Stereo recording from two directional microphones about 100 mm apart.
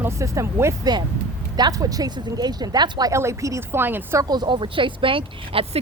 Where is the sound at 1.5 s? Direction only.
40° right (ahead or behind).